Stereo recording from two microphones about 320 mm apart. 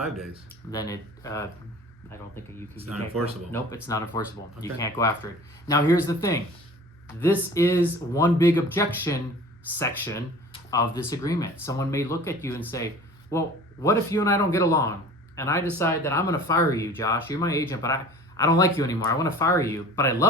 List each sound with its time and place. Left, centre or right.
0.7 s speech: centre
3.5 s speech: centre